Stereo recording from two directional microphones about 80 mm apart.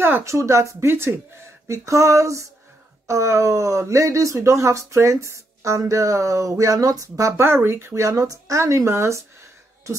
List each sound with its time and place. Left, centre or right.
0.2 s speech: right
7.4 s speech: right